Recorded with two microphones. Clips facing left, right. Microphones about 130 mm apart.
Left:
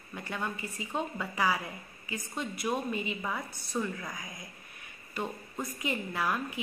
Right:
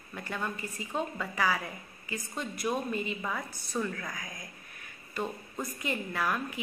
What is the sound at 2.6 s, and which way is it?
A woman's voice, 10° left (ahead or behind).